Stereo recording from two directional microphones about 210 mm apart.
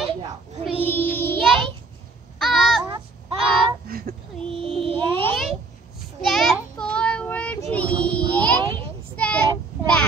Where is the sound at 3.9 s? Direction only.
45° right (ahead or behind).